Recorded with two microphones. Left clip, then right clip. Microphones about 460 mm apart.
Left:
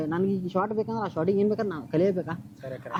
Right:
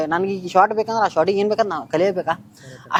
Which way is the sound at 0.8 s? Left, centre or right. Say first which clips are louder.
Right 11 dB; right.